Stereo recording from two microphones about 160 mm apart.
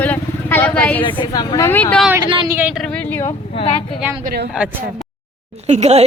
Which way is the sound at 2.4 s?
15° right (ahead or behind).